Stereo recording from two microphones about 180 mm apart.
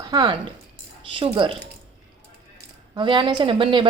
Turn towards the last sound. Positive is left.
turn(degrees=-30)  # may be behind; listen again after turning